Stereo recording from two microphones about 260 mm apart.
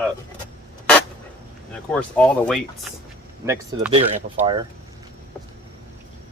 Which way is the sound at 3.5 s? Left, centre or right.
Centre.